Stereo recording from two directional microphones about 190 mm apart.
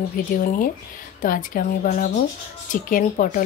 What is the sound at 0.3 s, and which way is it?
A woman's voice, 45° left (ahead or behind).